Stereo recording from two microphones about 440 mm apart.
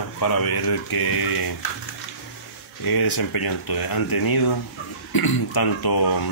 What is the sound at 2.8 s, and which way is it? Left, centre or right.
Speech, left.